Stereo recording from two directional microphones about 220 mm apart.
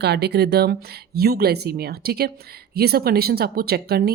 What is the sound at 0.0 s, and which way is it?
Speech, 50° right (ahead or behind).